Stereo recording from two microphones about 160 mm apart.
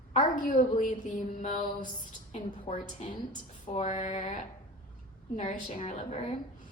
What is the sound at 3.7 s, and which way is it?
Music, 45° left (ahead or behind).